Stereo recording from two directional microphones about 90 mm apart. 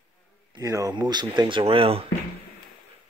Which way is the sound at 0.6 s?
35° right (ahead or behind).